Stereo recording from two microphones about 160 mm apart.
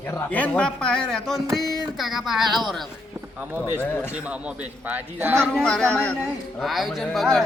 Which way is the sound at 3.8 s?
10° left (ahead or behind).